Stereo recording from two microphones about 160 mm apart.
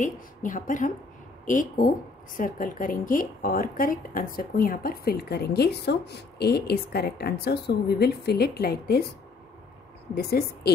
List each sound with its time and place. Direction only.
0.0 s a woman's voice: 55° left (ahead or behind); by 9.0 s 80° left
10.1 s a woman's voice: 75° left (ahead or behind)